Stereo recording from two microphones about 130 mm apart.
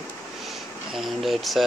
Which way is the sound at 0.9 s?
Centre (ahead or behind).